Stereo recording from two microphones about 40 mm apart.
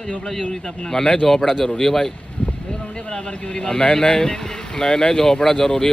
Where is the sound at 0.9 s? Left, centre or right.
Centre.